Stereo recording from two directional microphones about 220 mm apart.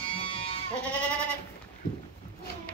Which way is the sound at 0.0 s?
25° left (ahead or behind).